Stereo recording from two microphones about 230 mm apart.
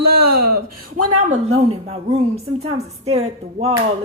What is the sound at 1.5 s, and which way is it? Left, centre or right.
A woman's voice, right.